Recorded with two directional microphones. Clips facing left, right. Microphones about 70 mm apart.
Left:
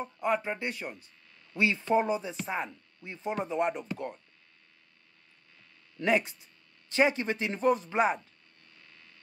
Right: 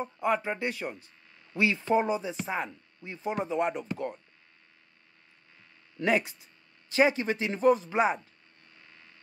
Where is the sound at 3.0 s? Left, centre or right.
Centre.